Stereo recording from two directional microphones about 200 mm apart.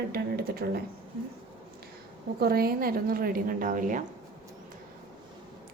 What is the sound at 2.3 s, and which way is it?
A woman's voice, 50° right (ahead or behind).